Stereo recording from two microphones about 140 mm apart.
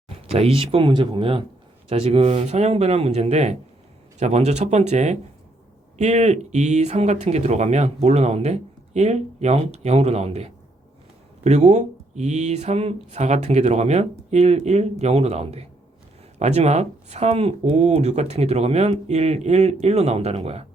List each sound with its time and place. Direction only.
0.1 s speech: 45° right (ahead or behind)